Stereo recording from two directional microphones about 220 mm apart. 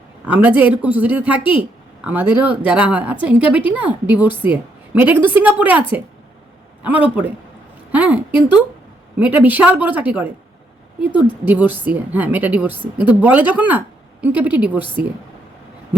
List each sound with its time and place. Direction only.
0.3 s a woman's voice: 5° right (ahead or behind)